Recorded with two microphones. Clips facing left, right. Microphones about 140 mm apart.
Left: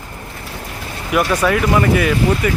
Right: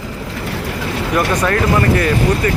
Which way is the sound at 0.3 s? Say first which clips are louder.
Right 8 dB; 85° right.